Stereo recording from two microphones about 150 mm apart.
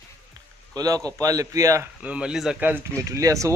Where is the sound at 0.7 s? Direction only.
25° right (ahead or behind).